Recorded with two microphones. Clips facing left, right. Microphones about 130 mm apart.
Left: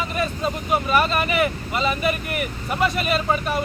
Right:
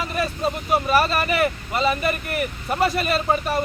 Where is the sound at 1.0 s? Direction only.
40° right (ahead or behind).